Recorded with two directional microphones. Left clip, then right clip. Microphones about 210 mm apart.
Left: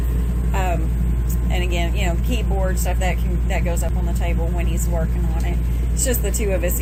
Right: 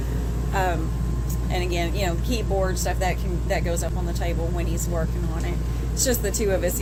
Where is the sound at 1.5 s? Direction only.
90° right.